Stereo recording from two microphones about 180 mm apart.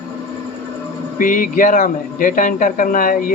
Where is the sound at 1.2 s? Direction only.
50° left (ahead or behind).